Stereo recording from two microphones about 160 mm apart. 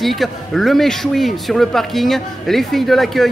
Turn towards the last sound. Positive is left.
turn(degrees=0)  # may be behind; listen again after turning